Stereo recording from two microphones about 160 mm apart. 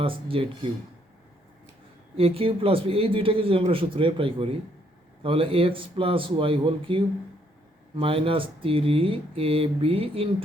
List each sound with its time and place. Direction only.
0.0 s speech: 35° right (ahead or behind)
2.1 s speech: 35° right (ahead or behind)